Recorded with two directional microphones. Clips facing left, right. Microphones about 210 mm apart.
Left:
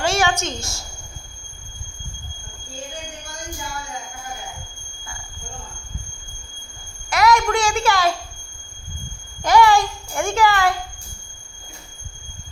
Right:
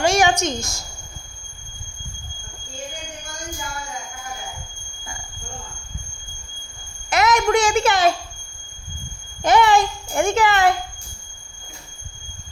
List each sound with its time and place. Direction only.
0.0 s a woman's voice: 15° right (ahead or behind)
7.1 s a child's voice: 20° right (ahead or behind)
9.4 s a child's voice: 20° right (ahead or behind)